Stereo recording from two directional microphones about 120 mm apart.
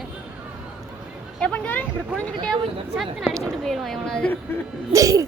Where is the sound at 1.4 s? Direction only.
10° left (ahead or behind).